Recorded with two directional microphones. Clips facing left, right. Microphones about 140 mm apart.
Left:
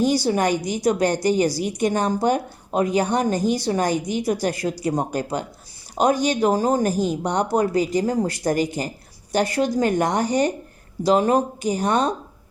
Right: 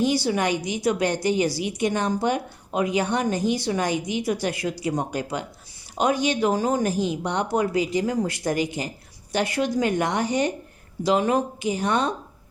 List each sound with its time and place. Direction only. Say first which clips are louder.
0.0 s a woman's voice: left 3 dB; 40° left (ahead or behind)